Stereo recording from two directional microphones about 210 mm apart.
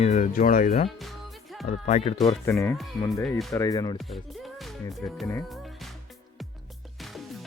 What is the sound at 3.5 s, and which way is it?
Speech, 15° left (ahead or behind).